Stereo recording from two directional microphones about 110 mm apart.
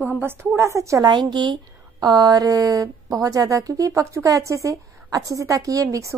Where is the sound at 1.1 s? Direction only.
45° right (ahead or behind).